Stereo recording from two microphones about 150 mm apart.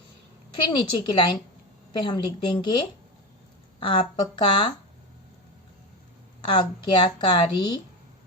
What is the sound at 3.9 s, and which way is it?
Speech, 30° left (ahead or behind).